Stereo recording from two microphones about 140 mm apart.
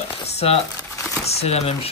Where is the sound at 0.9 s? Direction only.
20° left (ahead or behind).